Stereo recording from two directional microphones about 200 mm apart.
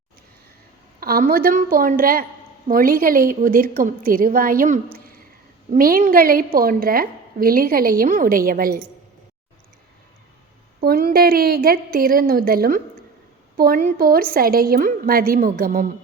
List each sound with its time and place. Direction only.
0.9 s a woman's voice: 50° right (ahead or behind)
10.8 s a woman's voice: 50° right (ahead or behind)